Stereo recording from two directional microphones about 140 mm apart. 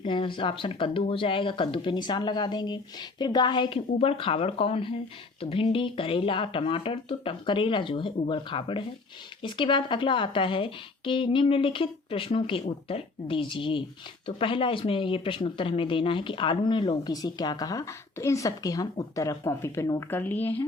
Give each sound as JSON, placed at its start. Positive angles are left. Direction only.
{"t": 0.0, "sound": "speech", "side_deg": 35}